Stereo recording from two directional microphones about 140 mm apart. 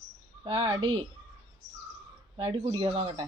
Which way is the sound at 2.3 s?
40° right (ahead or behind).